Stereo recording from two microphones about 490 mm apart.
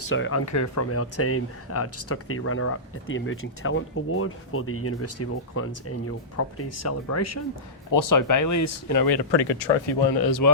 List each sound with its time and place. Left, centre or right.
0.1 s speech: left